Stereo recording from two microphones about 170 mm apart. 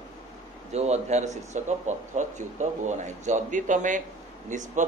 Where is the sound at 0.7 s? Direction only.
40° right (ahead or behind).